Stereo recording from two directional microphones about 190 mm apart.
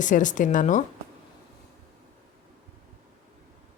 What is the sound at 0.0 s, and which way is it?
Speech, 40° left (ahead or behind).